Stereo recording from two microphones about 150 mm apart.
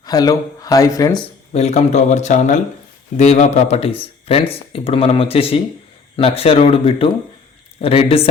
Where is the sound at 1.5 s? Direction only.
45° left (ahead or behind).